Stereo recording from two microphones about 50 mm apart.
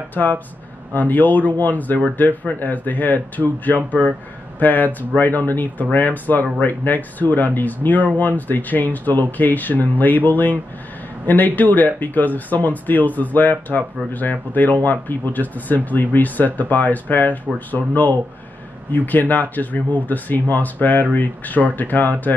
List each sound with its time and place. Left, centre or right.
0.1 s speech: left